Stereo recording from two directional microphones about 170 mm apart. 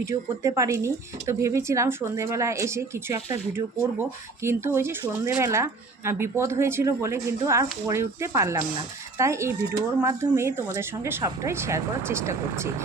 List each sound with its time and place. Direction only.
0.0 s speech: 15° right (ahead or behind)